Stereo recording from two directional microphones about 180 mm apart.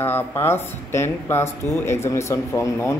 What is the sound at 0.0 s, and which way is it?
Speech, 15° left (ahead or behind).